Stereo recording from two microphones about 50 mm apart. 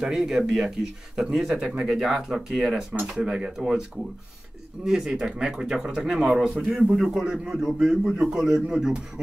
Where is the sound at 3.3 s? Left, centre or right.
Centre.